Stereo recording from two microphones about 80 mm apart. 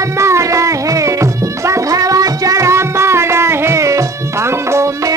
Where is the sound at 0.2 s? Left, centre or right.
Right.